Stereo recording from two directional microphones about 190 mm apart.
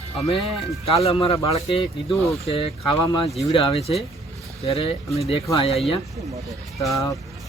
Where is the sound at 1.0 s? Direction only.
30° left (ahead or behind).